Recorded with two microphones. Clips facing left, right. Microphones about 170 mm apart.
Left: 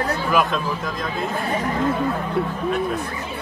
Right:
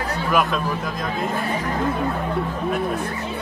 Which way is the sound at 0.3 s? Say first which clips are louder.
Even; centre (ahead or behind).